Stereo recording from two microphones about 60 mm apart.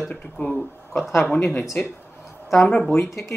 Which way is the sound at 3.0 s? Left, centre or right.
Left.